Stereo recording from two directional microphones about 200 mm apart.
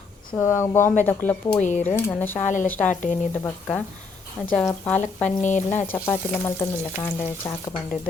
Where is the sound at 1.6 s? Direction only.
35° left (ahead or behind).